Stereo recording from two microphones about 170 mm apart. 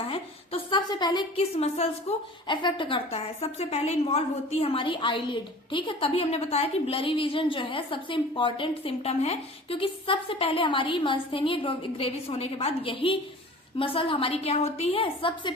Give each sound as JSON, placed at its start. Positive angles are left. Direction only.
{"t": 0.0, "sound": "a woman's voice", "side_deg": 35}